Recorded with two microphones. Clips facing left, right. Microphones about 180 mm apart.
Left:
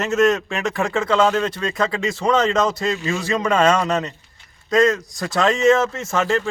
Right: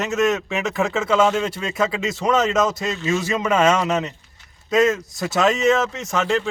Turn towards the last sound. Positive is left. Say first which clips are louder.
# left 1 dB
turn(degrees=0)  # may be behind; listen again after turning